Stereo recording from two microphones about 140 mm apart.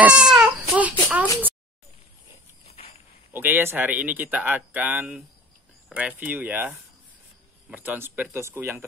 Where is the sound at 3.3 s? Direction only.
15° right (ahead or behind).